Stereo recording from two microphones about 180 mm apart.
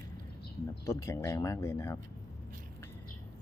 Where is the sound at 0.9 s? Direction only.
15° left (ahead or behind).